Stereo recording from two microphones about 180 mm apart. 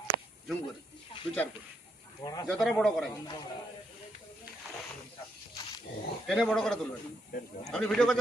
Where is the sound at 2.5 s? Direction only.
5° left (ahead or behind).